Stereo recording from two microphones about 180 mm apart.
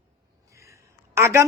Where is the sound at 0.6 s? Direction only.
15° right (ahead or behind).